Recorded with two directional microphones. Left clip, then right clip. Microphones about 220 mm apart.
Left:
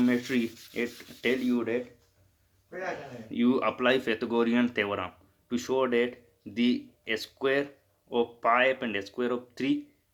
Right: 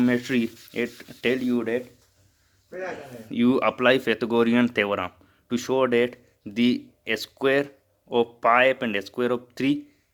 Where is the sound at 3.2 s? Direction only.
45° right (ahead or behind).